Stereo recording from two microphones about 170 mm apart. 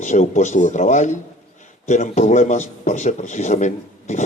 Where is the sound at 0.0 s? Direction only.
45° left (ahead or behind).